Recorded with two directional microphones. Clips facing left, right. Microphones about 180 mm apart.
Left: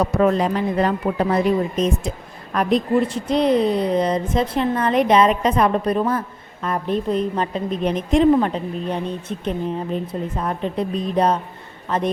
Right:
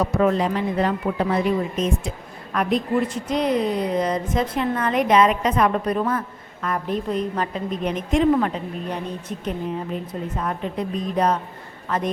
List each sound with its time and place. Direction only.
0.0 s a woman's voice: 40° left (ahead or behind)